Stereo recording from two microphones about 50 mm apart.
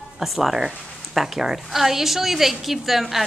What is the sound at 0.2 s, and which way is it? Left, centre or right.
A woman's voice, centre.